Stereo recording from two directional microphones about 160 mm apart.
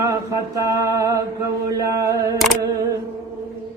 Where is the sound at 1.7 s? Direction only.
20° right (ahead or behind).